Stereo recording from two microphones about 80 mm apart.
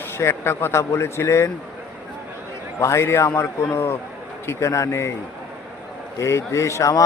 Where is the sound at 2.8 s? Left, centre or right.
Left.